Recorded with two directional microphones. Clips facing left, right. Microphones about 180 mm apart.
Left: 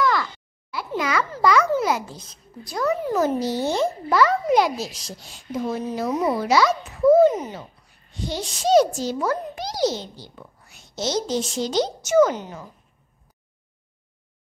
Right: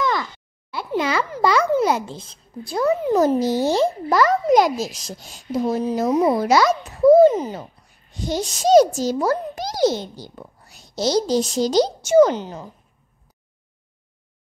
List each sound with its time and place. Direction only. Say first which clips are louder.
0.0 s a sound: left 1 dB; 20° right (ahead or behind)
1.4 s a child's voice: right 2 dB; 30° right (ahead or behind)
3.2 s a child's voice: right 5 dB; 40° right (ahead or behind)
8.3 s a child's voice: right 4 dB; 45° right (ahead or behind)